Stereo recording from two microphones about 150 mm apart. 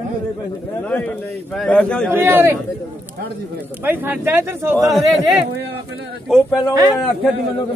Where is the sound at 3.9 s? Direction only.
15° right (ahead or behind).